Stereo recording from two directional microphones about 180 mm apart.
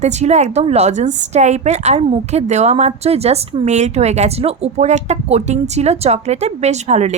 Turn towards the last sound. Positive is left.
turn(degrees=-40)  # may be behind; listen again after turning